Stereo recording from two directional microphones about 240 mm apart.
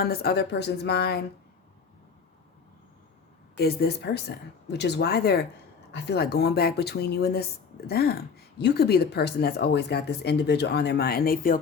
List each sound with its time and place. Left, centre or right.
0.0 s speech: left
3.5 s speech: left